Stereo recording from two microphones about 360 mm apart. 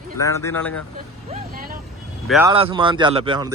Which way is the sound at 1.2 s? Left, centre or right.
Right.